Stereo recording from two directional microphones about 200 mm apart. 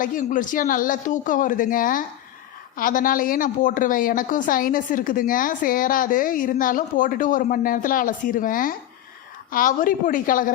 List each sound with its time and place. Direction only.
0.0 s a woman's voice: 40° left (ahead or behind)